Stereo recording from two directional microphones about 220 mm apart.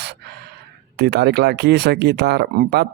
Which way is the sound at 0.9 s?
50° right (ahead or behind).